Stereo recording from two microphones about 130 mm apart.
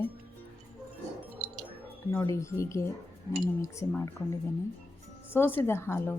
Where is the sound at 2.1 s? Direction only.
20° left (ahead or behind).